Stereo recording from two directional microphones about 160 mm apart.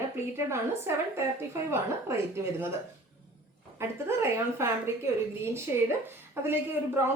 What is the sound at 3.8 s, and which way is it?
A woman's voice, 15° right (ahead or behind).